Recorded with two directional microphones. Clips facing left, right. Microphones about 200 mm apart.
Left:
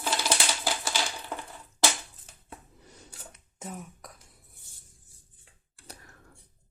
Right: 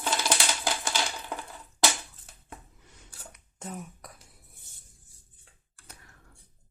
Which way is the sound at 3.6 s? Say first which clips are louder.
Right 1 dB; centre (ahead or behind).